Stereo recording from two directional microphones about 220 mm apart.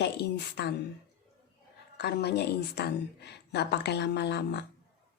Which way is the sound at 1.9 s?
50° left (ahead or behind).